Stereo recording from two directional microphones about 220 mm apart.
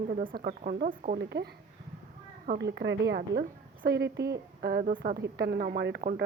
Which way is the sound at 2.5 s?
50° right (ahead or behind).